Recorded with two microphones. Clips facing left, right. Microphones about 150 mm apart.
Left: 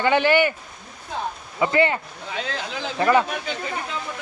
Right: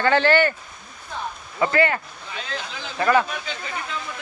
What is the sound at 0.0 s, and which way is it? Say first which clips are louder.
Speech: even; 15° left (ahead or behind).